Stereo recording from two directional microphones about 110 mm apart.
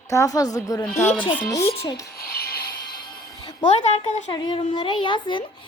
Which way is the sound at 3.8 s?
90° left.